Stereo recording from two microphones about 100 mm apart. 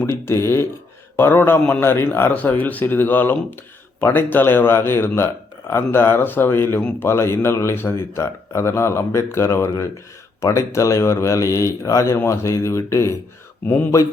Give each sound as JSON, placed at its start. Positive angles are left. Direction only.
{"t": 0.0, "sound": "speech", "side_deg": 25}